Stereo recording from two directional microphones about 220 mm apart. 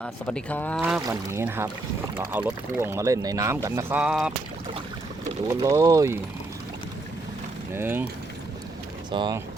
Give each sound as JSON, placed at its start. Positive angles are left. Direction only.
{"t": 0.0, "sound": "speech", "side_deg": 5}
{"t": 0.8, "sound": "speech", "side_deg": -5}
{"t": 5.5, "sound": "speech", "side_deg": -15}
{"t": 7.8, "sound": "speech", "side_deg": -10}
{"t": 9.0, "sound": "speech", "side_deg": -20}